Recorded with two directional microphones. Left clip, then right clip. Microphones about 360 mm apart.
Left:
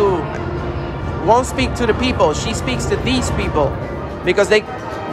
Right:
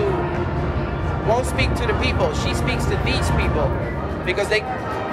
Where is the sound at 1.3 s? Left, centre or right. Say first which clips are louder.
Left 6 dB; left.